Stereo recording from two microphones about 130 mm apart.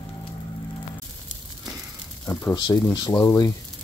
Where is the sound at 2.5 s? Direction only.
30° left (ahead or behind).